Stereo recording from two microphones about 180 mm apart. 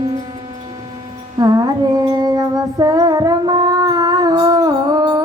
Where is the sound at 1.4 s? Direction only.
20° right (ahead or behind).